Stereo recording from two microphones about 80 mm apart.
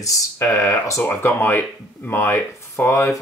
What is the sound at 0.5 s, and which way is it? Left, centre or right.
Speech, left.